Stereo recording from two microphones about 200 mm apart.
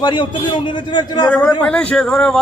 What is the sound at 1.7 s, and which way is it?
Speech, 5° left (ahead or behind).